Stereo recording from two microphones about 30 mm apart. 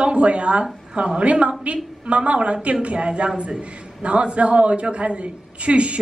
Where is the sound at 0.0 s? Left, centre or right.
Right.